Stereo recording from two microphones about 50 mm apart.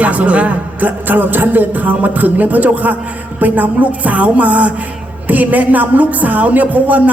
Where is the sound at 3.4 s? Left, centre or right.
Right.